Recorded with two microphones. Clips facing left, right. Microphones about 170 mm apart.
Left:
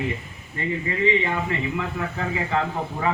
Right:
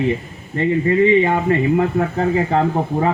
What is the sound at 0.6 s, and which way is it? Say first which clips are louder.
Speech: right 10 dB; 45° right (ahead or behind).